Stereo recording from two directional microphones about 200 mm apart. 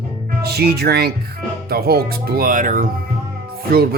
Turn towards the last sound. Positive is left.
turn(degrees=-50)  # may be behind; listen again after turning